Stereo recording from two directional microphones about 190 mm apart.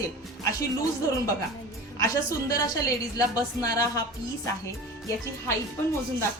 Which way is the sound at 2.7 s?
20° left (ahead or behind).